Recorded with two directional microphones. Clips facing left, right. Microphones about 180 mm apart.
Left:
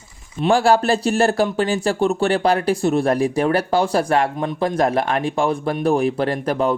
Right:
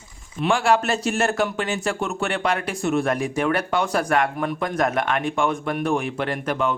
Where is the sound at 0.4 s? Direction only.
35° left (ahead or behind).